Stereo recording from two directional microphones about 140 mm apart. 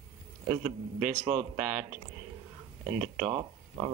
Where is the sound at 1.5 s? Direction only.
10° right (ahead or behind).